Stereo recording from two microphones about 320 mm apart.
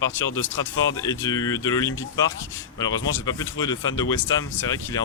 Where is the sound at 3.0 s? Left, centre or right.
Left.